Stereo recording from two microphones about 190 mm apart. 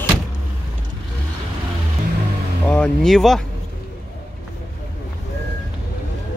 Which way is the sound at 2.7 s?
5° left (ahead or behind).